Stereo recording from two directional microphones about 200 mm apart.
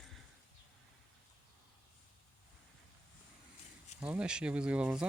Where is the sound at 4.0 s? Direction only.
5° right (ahead or behind).